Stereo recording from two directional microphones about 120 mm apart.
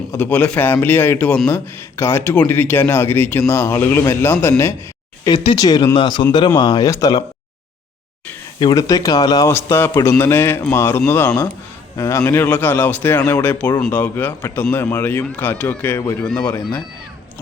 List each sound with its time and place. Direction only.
0.1 s a man's voice: 15° left (ahead or behind)
5.5 s speech: 30° left (ahead or behind)
8.7 s speech: 30° left (ahead or behind)
9.5 s a man's voice: 20° left (ahead or behind)